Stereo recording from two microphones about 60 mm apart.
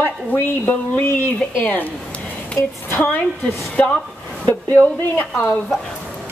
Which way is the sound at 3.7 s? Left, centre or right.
Centre.